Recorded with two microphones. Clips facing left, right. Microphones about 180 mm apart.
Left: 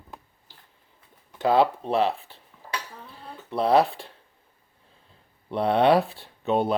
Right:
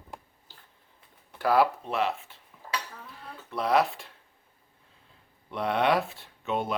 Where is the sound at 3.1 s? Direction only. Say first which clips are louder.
Left 5 dB; 30° left (ahead or behind).